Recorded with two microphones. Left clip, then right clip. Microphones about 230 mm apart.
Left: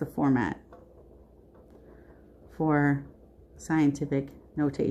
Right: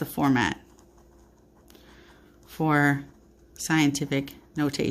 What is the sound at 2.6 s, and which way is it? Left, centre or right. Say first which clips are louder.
Speech: right 3 dB; right.